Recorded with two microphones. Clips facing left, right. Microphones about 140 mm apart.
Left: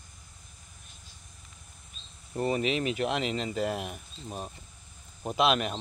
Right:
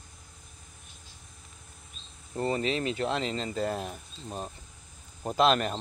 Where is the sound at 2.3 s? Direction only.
15° left (ahead or behind).